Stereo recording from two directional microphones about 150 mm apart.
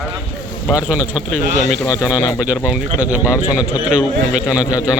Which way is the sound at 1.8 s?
20° left (ahead or behind).